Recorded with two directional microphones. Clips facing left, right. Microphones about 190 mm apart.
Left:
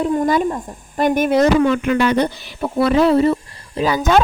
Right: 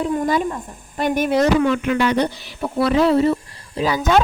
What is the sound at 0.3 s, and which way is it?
Speech, 45° left (ahead or behind).